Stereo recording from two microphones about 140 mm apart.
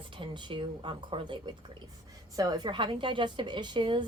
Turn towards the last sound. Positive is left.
turn(degrees=-35)  # may be behind; listen again after turning